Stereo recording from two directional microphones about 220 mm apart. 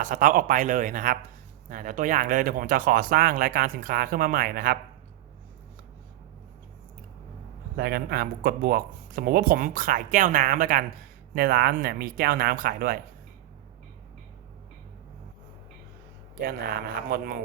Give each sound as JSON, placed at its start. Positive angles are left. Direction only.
{"t": 0.0, "sound": "speech", "side_deg": -35}
{"t": 7.8, "sound": "speech", "side_deg": -45}
{"t": 16.4, "sound": "speech", "side_deg": -45}